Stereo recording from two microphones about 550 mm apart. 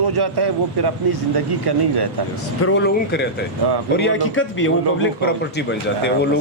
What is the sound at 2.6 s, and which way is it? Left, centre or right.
A man's voice, left.